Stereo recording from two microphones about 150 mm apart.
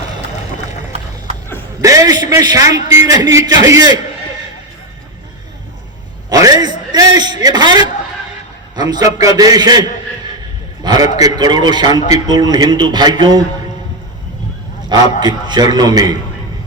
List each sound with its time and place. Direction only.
1.8 s a man's voice: 20° right (ahead or behind)
6.3 s a sound: 25° right (ahead or behind)
8.7 s a man's voice: 25° right (ahead or behind)
10.8 s a man's voice: 25° right (ahead or behind)
14.9 s a man's voice: 45° left (ahead or behind)
15.2 s a man's voice: 30° right (ahead or behind)